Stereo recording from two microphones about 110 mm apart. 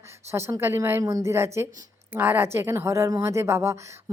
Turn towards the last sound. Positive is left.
turn(degrees=-25)  # may be behind; listen again after turning